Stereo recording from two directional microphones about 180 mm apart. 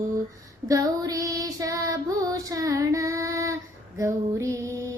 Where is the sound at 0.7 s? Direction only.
20° right (ahead or behind).